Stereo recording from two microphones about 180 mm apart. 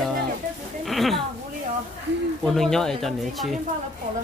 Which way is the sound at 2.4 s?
Centre (ahead or behind).